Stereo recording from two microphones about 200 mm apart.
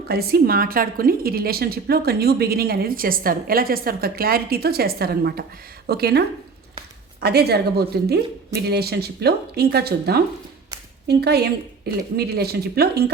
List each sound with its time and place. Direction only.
0.1 s a woman's voice: 50° right (ahead or behind)